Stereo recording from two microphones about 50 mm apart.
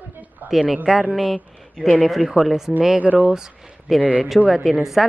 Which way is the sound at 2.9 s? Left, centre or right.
Right.